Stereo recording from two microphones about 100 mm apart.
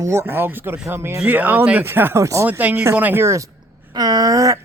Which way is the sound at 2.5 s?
15° right (ahead or behind).